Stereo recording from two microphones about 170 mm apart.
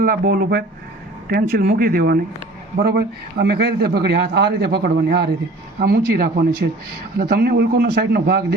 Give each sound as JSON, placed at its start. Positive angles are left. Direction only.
{"t": 0.0, "sound": "a man's voice", "side_deg": -60}